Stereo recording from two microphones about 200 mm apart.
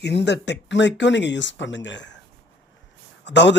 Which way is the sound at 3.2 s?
60° left (ahead or behind).